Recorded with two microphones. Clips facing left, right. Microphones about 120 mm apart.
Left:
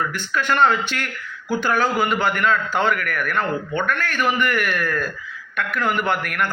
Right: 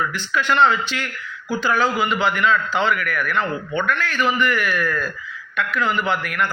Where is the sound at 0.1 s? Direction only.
50° left (ahead or behind).